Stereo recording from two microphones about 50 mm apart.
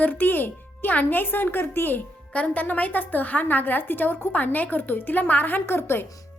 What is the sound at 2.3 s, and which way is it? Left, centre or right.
A woman's voice, left.